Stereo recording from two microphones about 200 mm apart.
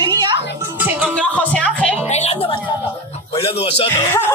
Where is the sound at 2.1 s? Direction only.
35° left (ahead or behind).